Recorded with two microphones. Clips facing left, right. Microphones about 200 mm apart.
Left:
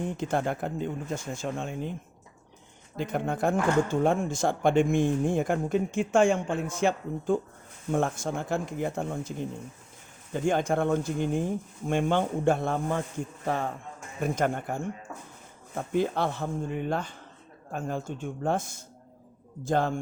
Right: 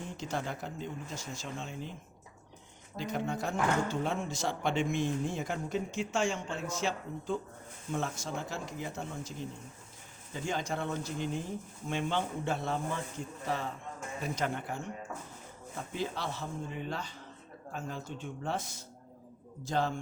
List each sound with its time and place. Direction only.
0.2 s speech: 55° left (ahead or behind)
3.0 s speech: 55° left (ahead or behind)